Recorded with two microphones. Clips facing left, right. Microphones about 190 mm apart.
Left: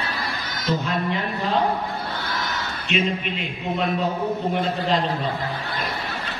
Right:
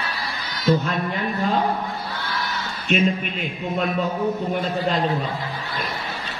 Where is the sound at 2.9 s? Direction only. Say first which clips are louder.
Right 3 dB; 45° right (ahead or behind).